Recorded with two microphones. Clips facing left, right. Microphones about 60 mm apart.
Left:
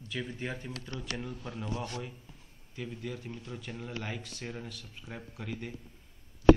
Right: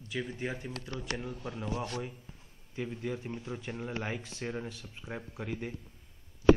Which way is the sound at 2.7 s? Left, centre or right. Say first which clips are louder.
Right 3 dB; right.